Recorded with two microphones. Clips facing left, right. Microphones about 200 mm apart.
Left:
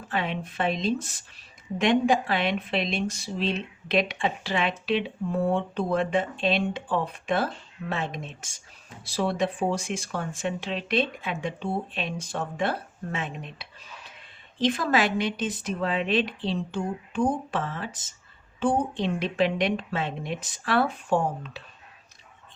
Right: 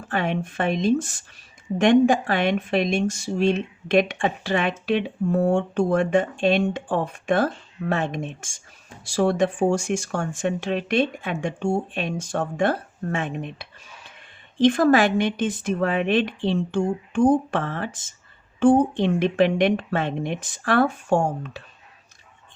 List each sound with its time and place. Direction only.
0.1 s speech: 50° right (ahead or behind)
18.9 s speech: 55° right (ahead or behind)